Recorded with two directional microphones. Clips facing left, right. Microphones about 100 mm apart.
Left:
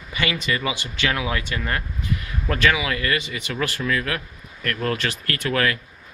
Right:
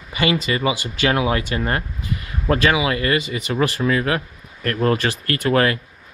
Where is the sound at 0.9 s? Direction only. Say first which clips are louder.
Right 5 dB; 40° right (ahead or behind).